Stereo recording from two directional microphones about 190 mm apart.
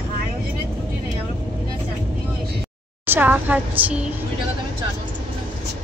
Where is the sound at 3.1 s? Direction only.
10° right (ahead or behind).